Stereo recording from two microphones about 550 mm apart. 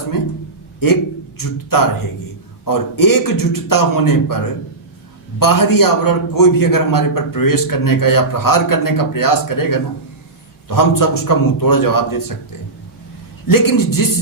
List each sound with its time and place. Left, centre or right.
1.4 s a man's voice: left
13.5 s a man's voice: left